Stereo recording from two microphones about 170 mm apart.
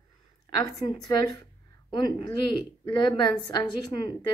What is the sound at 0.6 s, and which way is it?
A woman's voice, 20° left (ahead or behind).